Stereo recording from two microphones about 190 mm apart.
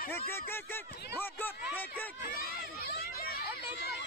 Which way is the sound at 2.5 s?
50° left (ahead or behind).